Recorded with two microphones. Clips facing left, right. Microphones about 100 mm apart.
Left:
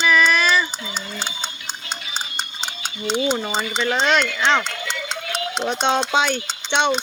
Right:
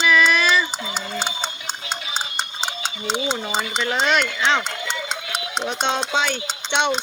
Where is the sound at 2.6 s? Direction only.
30° right (ahead or behind).